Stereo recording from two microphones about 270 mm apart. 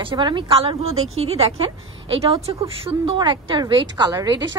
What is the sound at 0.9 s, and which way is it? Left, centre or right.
Speech, right.